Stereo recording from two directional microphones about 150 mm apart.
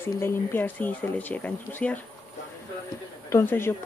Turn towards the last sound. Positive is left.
turn(degrees=15)  # may be behind; listen again after turning